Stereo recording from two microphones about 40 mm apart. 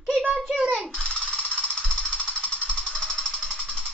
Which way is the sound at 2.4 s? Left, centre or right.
Left.